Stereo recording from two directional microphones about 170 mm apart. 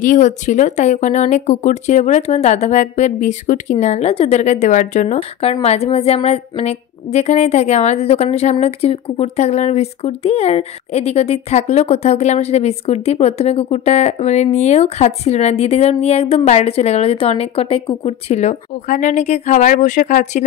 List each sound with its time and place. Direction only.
0.0 s a woman's voice: 50° left (ahead or behind)